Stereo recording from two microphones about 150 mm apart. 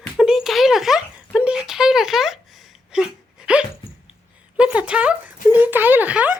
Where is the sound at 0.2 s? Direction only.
5° right (ahead or behind).